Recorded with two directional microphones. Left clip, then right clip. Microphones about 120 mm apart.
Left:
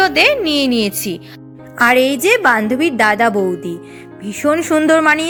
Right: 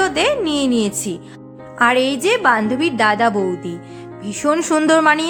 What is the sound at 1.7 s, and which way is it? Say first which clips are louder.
A woman's voice: left 3 dB; 35° left (ahead or behind).